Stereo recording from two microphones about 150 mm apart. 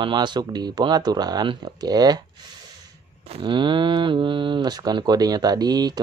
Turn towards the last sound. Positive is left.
turn(degrees=-25)  # may be behind; listen again after turning